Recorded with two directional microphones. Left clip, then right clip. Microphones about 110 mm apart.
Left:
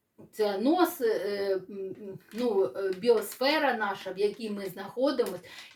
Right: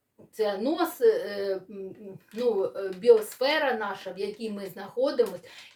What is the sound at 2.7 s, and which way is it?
Speech, 25° right (ahead or behind).